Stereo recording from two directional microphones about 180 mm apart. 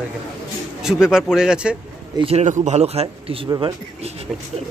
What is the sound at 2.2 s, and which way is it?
Speech, 35° right (ahead or behind).